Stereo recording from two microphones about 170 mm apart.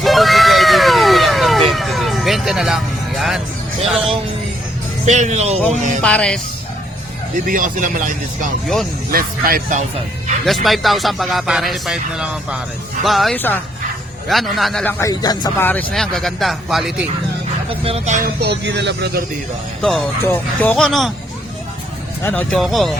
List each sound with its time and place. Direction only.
0.0 s a sound: centre (ahead or behind)
5.0 s speech: 45° right (ahead or behind)
6.0 s music: 5° left (ahead or behind)
7.4 s speech: 55° right (ahead or behind)
8.6 s speech: centre (ahead or behind)
9.1 s speech: 55° right (ahead or behind)
10.4 s speech: centre (ahead or behind)
15.1 s speech: 25° left (ahead or behind)
15.6 s speech: 10° left (ahead or behind)
17.7 s speech: 35° right (ahead or behind)
18.2 s speech: 70° right (ahead or behind)
19.8 s speech: 5° left (ahead or behind)
22.2 s speech: 10° left (ahead or behind)